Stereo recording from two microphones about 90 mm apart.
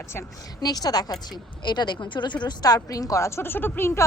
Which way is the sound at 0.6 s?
45° left (ahead or behind).